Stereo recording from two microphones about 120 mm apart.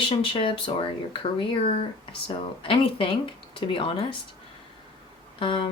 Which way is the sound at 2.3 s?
45° left (ahead or behind).